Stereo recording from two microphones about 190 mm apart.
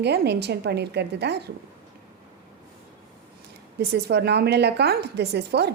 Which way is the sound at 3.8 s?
60° right (ahead or behind).